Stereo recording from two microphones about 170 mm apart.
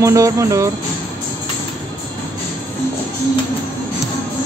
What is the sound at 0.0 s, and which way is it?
Speech, 20° right (ahead or behind).